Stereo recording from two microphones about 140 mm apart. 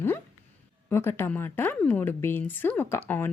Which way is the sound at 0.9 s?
15° left (ahead or behind).